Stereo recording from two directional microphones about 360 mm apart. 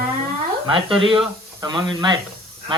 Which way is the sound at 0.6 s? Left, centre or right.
Centre.